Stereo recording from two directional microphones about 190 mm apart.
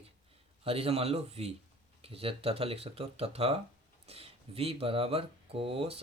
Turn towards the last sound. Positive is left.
turn(degrees=-30)  # may be behind; listen again after turning